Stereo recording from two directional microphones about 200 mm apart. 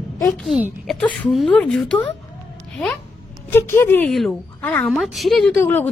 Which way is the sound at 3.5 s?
10° left (ahead or behind).